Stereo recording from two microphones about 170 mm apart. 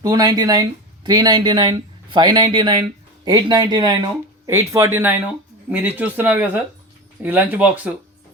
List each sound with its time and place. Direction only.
0.0 s speech: 20° right (ahead or behind)